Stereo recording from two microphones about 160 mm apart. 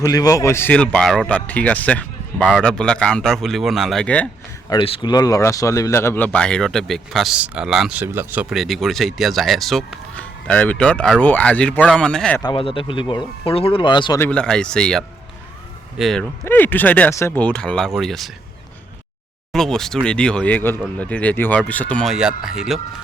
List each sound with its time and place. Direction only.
0.0 s speech: 20° left (ahead or behind)
4.7 s speech: 30° left (ahead or behind); by 12.4 s 5° left (ahead or behind)
12.4 s speech: 30° left (ahead or behind)
14.2 s speech: 5° left (ahead or behind)
16.4 s speech: 10° left (ahead or behind)
19.5 s speech: 5° left (ahead or behind)